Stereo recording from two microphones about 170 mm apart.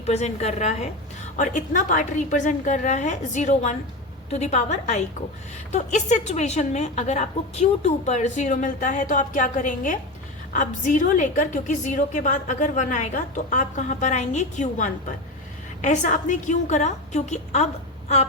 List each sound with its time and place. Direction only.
0.0 s a woman's voice: 40° left (ahead or behind)